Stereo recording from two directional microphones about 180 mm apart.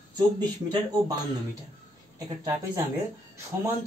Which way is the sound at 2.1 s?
20° right (ahead or behind).